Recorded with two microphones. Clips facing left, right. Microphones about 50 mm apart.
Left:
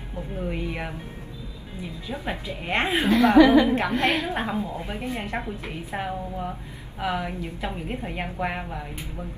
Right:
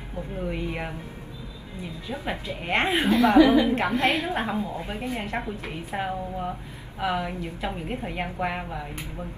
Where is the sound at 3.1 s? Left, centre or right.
Left.